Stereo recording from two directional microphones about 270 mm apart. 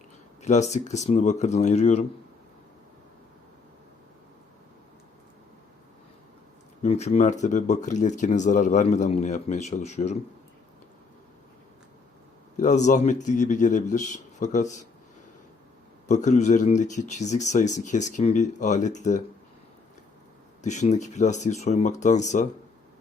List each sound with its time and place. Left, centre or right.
0.4 s speech: left
6.8 s speech: left
12.5 s speech: left
16.0 s speech: left
20.6 s speech: left